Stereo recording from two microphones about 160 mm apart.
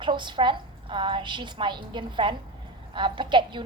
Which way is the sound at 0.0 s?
30° right (ahead or behind).